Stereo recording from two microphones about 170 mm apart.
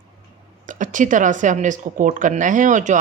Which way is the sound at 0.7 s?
50° right (ahead or behind).